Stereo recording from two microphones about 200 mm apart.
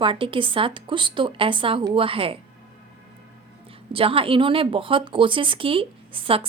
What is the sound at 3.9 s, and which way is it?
A woman's voice, 25° right (ahead or behind).